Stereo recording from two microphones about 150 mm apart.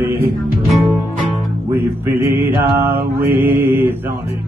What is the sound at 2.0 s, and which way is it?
Mantra, 15° right (ahead or behind).